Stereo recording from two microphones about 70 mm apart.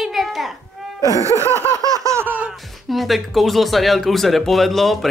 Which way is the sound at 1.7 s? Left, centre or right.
Right.